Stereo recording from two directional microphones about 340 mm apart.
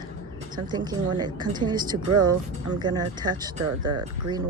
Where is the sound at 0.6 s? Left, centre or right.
Centre.